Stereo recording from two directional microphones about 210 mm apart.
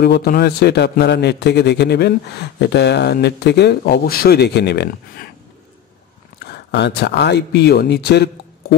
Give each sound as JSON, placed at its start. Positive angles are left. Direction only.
{"t": 0.0, "sound": "a man's voice", "side_deg": 50}
{"t": 6.4, "sound": "speech", "side_deg": 50}